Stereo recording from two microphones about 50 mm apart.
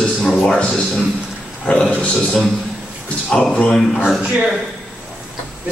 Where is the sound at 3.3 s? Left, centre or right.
Centre.